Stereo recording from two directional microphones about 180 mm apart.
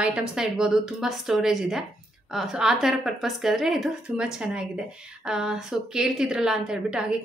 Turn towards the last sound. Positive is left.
turn(degrees=-5)  # may be behind; listen again after turning